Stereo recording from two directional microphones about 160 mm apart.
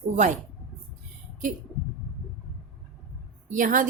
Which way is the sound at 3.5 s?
55° right (ahead or behind).